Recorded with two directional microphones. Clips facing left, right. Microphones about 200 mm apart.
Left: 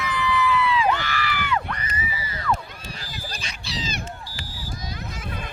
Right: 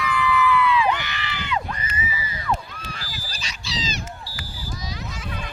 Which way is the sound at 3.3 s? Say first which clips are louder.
Right 3 dB; 55° left (ahead or behind).